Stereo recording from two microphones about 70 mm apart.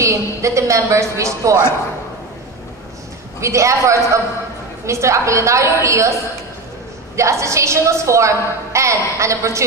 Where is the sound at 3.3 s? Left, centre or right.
Right.